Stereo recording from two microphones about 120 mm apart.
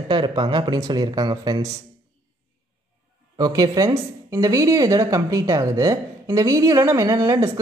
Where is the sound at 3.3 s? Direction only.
30° right (ahead or behind).